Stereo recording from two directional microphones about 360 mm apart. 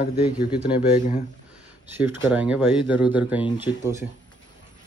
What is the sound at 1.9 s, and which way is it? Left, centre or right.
Speech, centre.